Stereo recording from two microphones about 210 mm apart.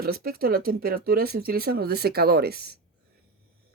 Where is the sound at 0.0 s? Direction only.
45° right (ahead or behind).